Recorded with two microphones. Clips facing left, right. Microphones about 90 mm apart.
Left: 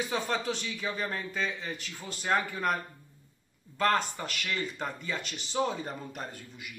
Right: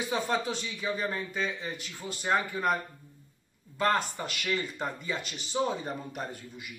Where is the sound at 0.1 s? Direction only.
5° right (ahead or behind).